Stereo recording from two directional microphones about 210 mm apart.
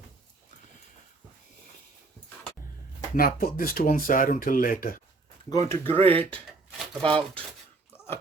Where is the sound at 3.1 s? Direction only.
45° left (ahead or behind).